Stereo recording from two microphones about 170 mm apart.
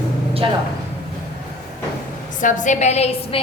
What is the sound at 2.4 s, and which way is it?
Speech, 45° left (ahead or behind).